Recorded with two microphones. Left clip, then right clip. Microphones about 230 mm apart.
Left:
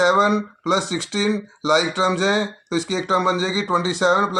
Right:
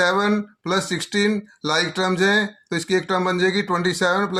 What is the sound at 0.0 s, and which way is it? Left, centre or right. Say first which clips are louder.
Speech: left 3 dB; right.